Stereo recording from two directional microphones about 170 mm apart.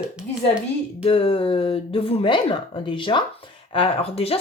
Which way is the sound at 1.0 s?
35° left (ahead or behind).